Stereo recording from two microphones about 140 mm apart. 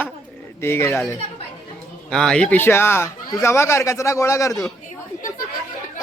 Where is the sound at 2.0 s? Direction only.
5° left (ahead or behind); by 4.5 s 20° left (ahead or behind).